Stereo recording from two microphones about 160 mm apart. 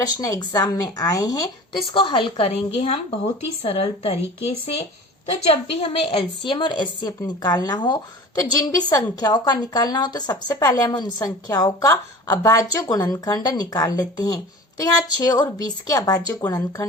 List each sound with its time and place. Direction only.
0.0 s a woman's voice: 20° left (ahead or behind)